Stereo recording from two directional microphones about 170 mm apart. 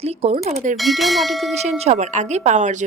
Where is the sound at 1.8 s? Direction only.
40° right (ahead or behind).